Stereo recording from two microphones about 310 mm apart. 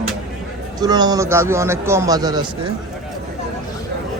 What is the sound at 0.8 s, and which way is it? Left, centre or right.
Speech, centre.